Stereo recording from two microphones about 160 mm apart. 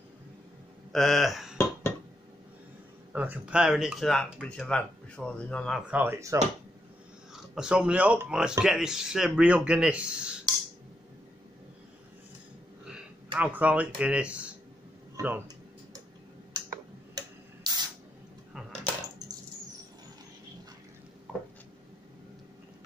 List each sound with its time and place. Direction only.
0.9 s speech: centre (ahead or behind)
1.6 s a sound: 15° left (ahead or behind)
3.1 s speech: 10° right (ahead or behind); by 5.8 s 5° left (ahead or behind)
5.9 s speech: 10° right (ahead or behind)
7.3 s speech: 5° right (ahead or behind)
12.8 s speech: 5° right (ahead or behind)
17.6 s spray: 25° right (ahead or behind)
18.5 s coin: centre (ahead or behind)